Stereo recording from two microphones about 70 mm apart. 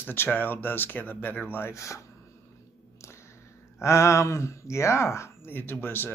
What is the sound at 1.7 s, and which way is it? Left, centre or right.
Speech, left.